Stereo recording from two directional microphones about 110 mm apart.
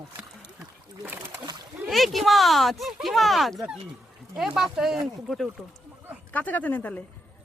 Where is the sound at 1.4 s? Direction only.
40° right (ahead or behind).